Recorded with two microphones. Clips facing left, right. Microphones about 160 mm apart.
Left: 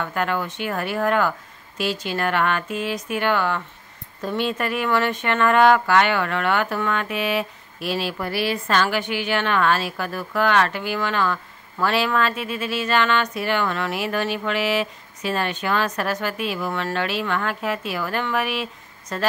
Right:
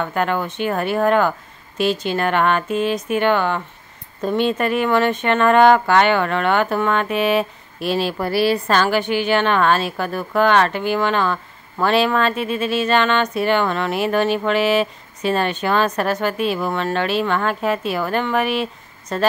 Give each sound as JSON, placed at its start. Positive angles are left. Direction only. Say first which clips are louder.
{"t": 0.0, "sound": "speech", "louder": "right 4 dB", "side_deg": -30}